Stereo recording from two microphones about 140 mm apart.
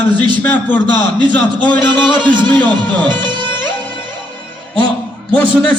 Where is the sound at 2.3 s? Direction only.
35° right (ahead or behind).